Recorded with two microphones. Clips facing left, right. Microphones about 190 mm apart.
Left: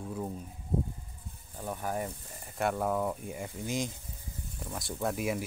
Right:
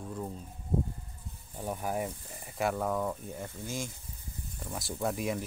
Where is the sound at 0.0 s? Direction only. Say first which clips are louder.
Left 2 dB; 5° left (ahead or behind).